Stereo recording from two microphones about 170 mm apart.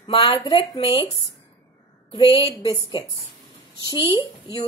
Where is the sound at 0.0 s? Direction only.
30° left (ahead or behind).